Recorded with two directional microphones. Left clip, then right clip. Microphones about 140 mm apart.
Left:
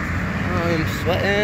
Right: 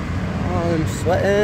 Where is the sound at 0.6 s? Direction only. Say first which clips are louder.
Right 1 dB; 40° right (ahead or behind).